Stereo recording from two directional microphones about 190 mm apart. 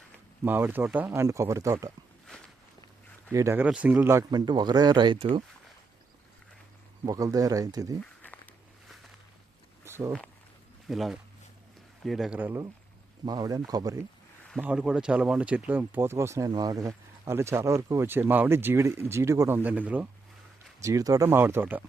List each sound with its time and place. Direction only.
0.4 s speech: 10° right (ahead or behind)
2.2 s walk: 5° left (ahead or behind)
3.3 s speech: 15° right (ahead or behind)
7.0 s speech: 20° right (ahead or behind)
9.8 s a sound: 15° right (ahead or behind)
10.8 s speech: centre (ahead or behind); by 14.0 s 20° right (ahead or behind)
14.6 s speech: 5° right (ahead or behind)
20.8 s speech: 20° right (ahead or behind)